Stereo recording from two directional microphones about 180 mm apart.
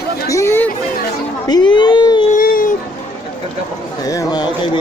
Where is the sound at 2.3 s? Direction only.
50° left (ahead or behind).